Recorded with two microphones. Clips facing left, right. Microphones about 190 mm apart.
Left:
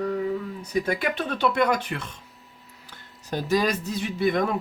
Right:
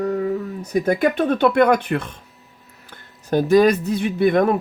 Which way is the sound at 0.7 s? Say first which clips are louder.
Right 7 dB; 50° right (ahead or behind).